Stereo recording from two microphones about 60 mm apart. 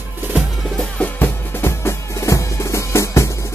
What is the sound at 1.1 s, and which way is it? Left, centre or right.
Music, left.